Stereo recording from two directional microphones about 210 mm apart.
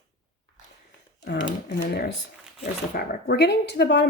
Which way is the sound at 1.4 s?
50° left (ahead or behind).